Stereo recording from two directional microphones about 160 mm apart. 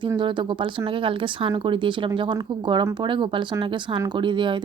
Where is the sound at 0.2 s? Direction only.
30° right (ahead or behind).